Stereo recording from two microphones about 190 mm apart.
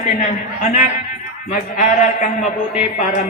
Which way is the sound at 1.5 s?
40° left (ahead or behind).